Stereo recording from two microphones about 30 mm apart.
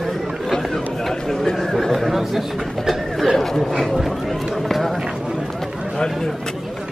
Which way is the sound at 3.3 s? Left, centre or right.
Centre.